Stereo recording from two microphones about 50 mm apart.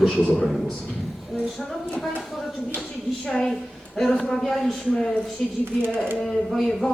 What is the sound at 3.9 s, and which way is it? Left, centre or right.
Speech, centre.